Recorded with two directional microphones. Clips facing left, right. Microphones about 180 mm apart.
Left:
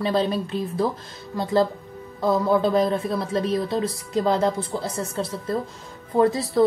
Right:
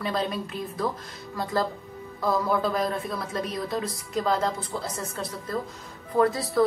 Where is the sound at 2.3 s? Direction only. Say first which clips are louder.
Left 5 dB; 25° left (ahead or behind).